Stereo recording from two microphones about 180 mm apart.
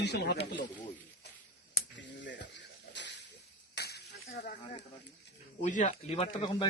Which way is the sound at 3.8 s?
65° left (ahead or behind).